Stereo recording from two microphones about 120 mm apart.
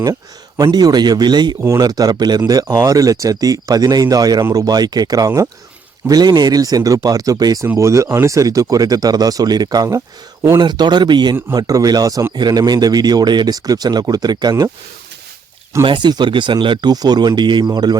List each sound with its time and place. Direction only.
0.6 s speech: 35° right (ahead or behind)
15.8 s speech: 40° right (ahead or behind)